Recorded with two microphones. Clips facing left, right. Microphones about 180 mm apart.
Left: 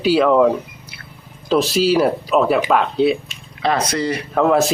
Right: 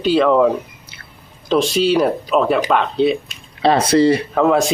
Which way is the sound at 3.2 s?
30° right (ahead or behind).